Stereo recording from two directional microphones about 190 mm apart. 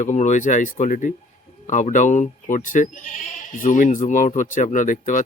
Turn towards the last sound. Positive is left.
turn(degrees=45)  # may be behind; listen again after turning